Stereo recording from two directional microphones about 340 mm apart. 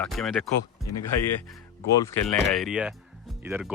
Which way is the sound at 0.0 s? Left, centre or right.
Centre.